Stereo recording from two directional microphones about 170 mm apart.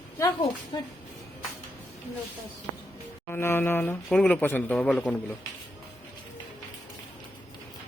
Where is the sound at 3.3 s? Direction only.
15° left (ahead or behind).